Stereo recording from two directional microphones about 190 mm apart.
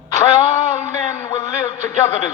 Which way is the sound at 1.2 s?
15° left (ahead or behind).